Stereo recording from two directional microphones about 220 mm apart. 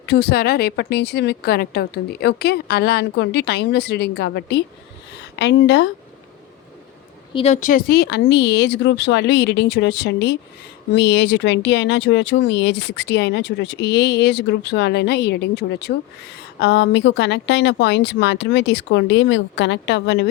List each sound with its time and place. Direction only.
0.0 s speech: 50° left (ahead or behind)
7.3 s speech: 30° left (ahead or behind); by 20.3 s 50° left (ahead or behind)